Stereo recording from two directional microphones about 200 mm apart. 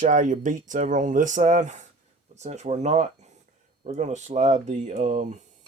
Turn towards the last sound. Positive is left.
turn(degrees=-35)  # may be behind; listen again after turning